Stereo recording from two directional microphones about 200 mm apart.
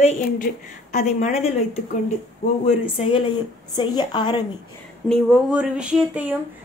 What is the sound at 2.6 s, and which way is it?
Speech, 30° left (ahead or behind).